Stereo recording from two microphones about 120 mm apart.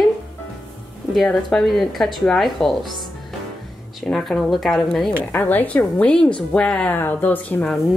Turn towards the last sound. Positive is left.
turn(degrees=15)  # may be behind; listen again after turning